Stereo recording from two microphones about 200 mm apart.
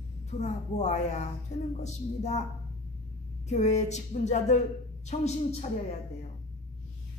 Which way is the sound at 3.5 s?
35° left (ahead or behind).